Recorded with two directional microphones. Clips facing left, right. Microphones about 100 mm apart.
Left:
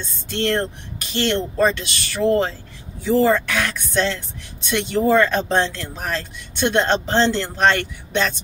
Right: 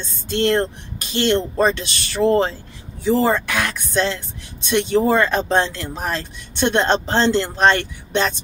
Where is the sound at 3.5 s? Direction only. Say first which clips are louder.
Right 1 dB; 10° right (ahead or behind).